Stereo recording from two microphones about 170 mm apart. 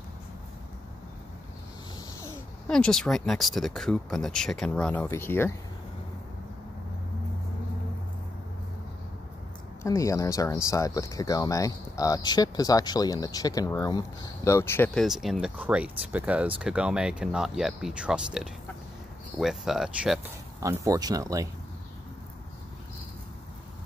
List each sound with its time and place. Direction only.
2.7 s speech: 5° left (ahead or behind)
9.8 s speech: 20° left (ahead or behind)
15.0 s speech: centre (ahead or behind)
20.6 s speech: 20° right (ahead or behind)